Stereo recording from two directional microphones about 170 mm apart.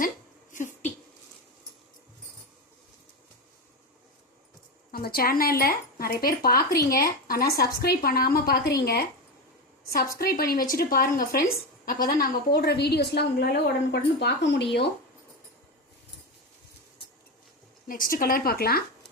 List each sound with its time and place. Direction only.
0.5 s a sound: 50° left (ahead or behind)
4.9 s speech: 60° left (ahead or behind)
10.2 s speech: 60° left (ahead or behind)
12.5 s a woman's voice: 70° left (ahead or behind); by 14.8 s 90° left
17.8 s speech: 55° left (ahead or behind)